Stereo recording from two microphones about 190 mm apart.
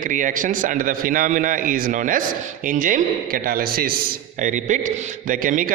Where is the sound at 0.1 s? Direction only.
45° right (ahead or behind).